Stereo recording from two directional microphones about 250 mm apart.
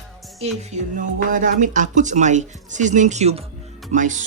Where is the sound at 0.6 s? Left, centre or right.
Right.